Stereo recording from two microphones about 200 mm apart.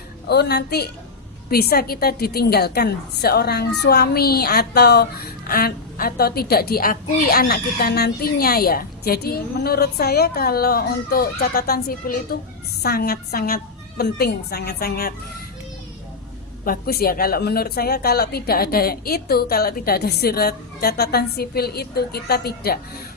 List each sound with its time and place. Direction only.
0.3 s a woman's voice: 55° left (ahead or behind)
16.6 s a woman's voice: 50° left (ahead or behind)